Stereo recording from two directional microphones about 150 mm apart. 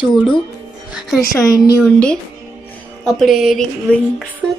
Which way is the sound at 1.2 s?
25° left (ahead or behind).